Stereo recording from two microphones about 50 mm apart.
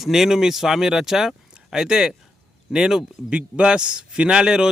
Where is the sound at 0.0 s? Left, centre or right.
Centre.